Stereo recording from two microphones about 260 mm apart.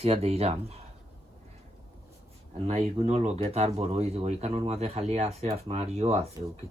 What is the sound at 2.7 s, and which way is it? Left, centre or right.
Speech, right.